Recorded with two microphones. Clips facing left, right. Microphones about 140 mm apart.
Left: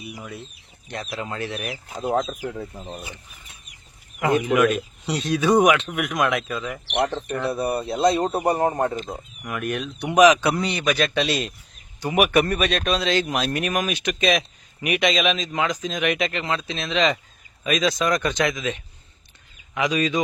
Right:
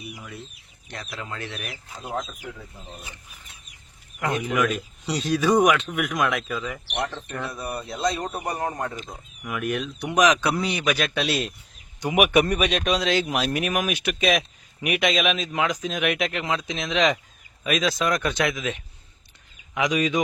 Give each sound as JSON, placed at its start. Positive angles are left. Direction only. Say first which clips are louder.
{"t": 0.9, "sound": "speech", "louder": "left 5 dB", "side_deg": 25}
{"t": 2.0, "sound": "speech", "louder": "left 8 dB", "side_deg": 85}
{"t": 4.4, "sound": "speech", "louder": "left 5 dB", "side_deg": 0}
{"t": 7.0, "sound": "speech", "louder": "left 7 dB", "side_deg": 35}
{"t": 9.4, "sound": "speech", "louder": "right 1 dB", "side_deg": 0}
{"t": 11.9, "sound": "a man's voice", "louder": "even", "side_deg": -10}